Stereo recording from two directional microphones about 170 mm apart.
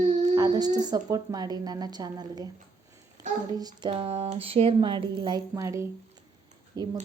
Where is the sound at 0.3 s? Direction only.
20° right (ahead or behind).